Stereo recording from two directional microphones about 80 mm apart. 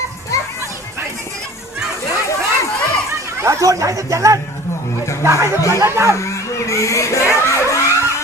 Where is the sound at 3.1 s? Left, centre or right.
Right.